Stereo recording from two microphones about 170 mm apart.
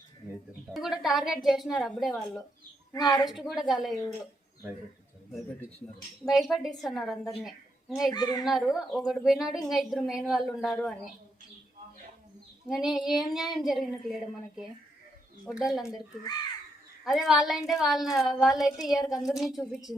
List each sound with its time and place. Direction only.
0.7 s a woman's voice: centre (ahead or behind)
2.9 s speech: 20° left (ahead or behind)
3.5 s a woman's voice: centre (ahead or behind)
6.2 s a woman's voice: centre (ahead or behind)
8.1 s speech: 25° left (ahead or behind)
8.4 s a woman's voice: centre (ahead or behind)
12.6 s a woman's voice: 5° right (ahead or behind)
17.0 s a woman's voice: centre (ahead or behind)